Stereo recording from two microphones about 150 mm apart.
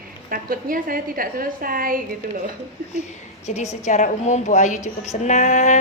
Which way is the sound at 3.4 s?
45° left (ahead or behind).